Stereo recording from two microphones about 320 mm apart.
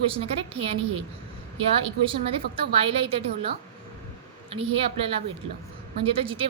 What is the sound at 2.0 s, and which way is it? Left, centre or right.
A woman's voice, centre.